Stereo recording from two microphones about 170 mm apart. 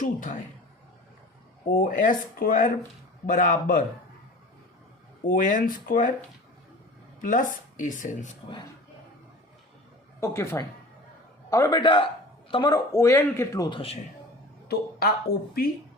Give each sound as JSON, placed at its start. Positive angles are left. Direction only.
{"t": 0.0, "sound": "speech", "side_deg": 50}
{"t": 1.6, "sound": "speech", "side_deg": 55}
{"t": 5.2, "sound": "speech", "side_deg": 55}
{"t": 7.2, "sound": "speech", "side_deg": 50}
{"t": 10.2, "sound": "a woman's voice", "side_deg": 15}
{"t": 14.7, "sound": "speech", "side_deg": 65}